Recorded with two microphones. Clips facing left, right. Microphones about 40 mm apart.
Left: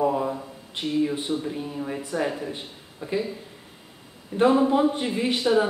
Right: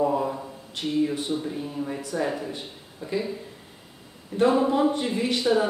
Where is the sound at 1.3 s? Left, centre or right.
Centre.